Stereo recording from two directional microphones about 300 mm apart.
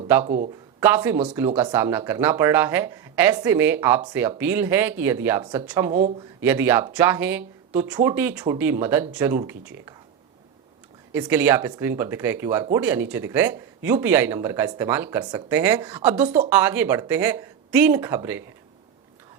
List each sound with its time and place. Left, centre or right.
0.1 s speech: centre
5.9 s speech: right
6.4 s speech: centre
11.1 s speech: centre